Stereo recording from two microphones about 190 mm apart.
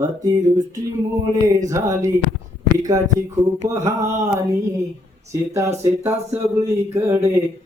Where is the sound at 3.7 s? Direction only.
15° right (ahead or behind).